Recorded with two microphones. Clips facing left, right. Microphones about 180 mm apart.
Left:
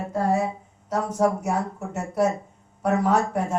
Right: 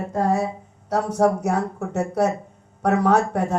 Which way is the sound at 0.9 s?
70° right (ahead or behind).